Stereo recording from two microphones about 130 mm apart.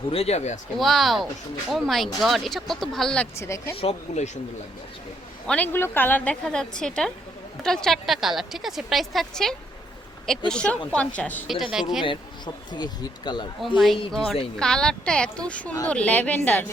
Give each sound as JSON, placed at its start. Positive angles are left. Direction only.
{"t": 0.1, "sound": "speech", "side_deg": 50}
{"t": 0.8, "sound": "a woman's voice", "side_deg": 0}
{"t": 3.3, "sound": "speech", "side_deg": 20}
{"t": 3.8, "sound": "speech", "side_deg": 55}
{"t": 5.5, "sound": "a woman's voice", "side_deg": 10}
{"t": 11.4, "sound": "a woman's voice", "side_deg": -5}
{"t": 12.7, "sound": "speech", "side_deg": 35}
{"t": 13.7, "sound": "a woman's voice", "side_deg": 0}